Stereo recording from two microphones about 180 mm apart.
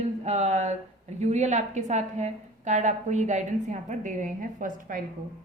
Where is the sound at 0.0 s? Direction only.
40° right (ahead or behind).